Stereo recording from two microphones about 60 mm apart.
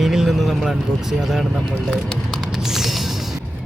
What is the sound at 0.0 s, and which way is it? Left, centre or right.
Speech, centre.